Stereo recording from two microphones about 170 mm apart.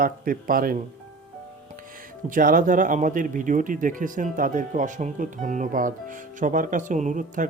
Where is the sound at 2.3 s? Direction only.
55° right (ahead or behind).